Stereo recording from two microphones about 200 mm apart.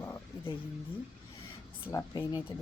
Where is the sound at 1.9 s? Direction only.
15° left (ahead or behind).